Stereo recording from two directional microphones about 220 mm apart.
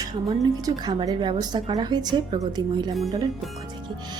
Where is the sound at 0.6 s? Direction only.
20° right (ahead or behind).